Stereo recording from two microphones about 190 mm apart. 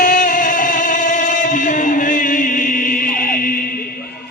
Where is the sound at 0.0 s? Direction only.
45° left (ahead or behind).